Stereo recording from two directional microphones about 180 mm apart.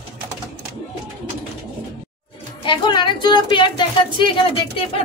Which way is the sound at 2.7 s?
25° left (ahead or behind).